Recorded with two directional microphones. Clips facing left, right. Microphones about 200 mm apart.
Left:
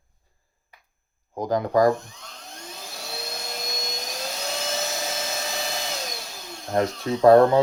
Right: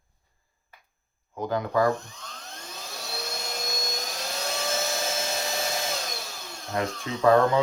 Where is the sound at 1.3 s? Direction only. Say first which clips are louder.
Left 4 dB; 35° left (ahead or behind).